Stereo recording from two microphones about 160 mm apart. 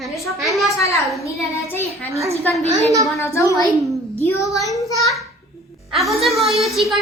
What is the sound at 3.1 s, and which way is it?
Speech, 20° left (ahead or behind).